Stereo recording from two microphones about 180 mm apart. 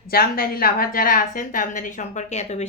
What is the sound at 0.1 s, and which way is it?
A woman's voice, 55° left (ahead or behind).